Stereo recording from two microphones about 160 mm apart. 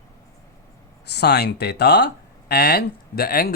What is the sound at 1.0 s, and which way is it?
Speech, 90° left.